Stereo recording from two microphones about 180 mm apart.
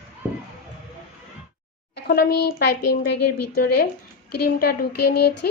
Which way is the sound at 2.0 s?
55° left (ahead or behind).